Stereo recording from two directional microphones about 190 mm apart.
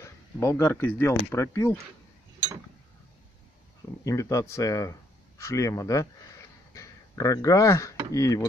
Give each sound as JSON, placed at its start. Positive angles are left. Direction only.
{"t": 0.0, "sound": "speech", "side_deg": 15}
{"t": 4.0, "sound": "speech", "side_deg": 15}